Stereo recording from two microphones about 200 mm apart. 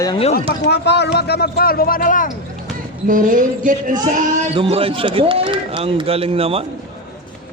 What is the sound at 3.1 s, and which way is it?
Speech, 40° right (ahead or behind).